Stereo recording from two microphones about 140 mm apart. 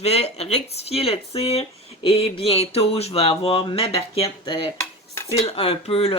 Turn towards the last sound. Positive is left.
turn(degrees=45)  # may be behind; listen again after turning